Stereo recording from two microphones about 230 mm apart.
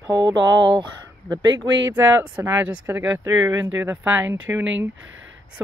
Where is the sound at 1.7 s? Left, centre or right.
Right.